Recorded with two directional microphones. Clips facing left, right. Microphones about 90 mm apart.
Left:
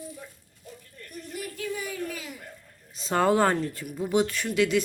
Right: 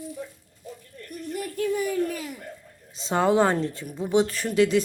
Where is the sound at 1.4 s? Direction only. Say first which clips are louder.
Right 7 dB; 45° right (ahead or behind).